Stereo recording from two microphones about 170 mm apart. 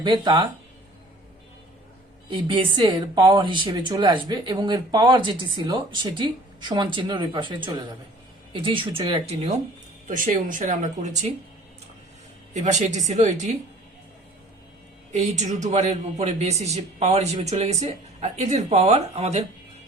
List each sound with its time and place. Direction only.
0.0 s speech: 25° right (ahead or behind)
2.6 s a man's voice: 25° right (ahead or behind)
10.1 s speech: 50° right (ahead or behind)
12.5 s speech: 45° right (ahead or behind)
15.1 s a man's voice: 45° right (ahead or behind)